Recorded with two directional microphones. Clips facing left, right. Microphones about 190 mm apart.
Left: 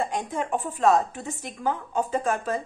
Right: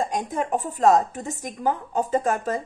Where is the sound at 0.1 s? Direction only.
40° right (ahead or behind).